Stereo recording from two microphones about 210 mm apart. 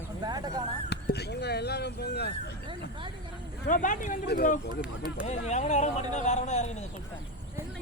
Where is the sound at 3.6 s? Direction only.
40° left (ahead or behind).